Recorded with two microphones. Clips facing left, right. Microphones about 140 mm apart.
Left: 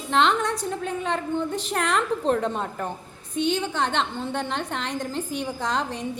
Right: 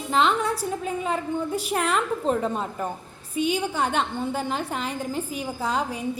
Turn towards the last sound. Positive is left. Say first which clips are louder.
# right 1 dB
turn(degrees=-10)  # may be behind; listen again after turning